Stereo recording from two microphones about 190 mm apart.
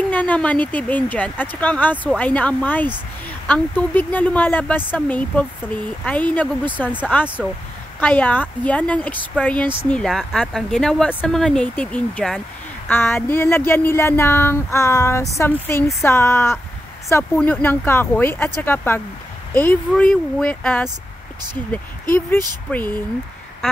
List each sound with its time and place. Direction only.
0.1 s speech: 10° left (ahead or behind)
8.0 s speech: 10° left (ahead or behind)
22.7 s speech: 10° left (ahead or behind)
23.6 s quack: 5° left (ahead or behind)